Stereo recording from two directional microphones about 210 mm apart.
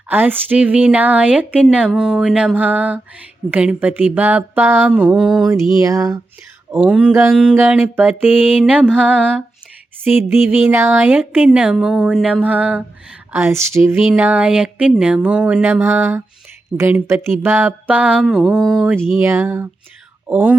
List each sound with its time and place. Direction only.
0.1 s speech: 10° right (ahead or behind)
5.8 s speech: 15° right (ahead or behind)
6.7 s speech: 5° right (ahead or behind)